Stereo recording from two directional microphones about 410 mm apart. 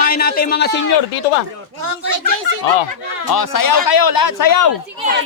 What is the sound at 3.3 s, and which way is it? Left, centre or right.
A man's voice, left.